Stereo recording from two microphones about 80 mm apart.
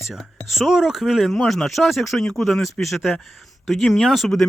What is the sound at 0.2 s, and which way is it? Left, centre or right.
Speech, centre.